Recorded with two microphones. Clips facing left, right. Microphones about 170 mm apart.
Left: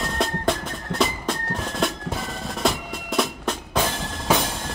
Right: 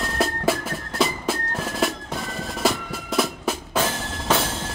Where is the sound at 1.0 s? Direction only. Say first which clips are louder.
Right 1 dB; 5° right (ahead or behind).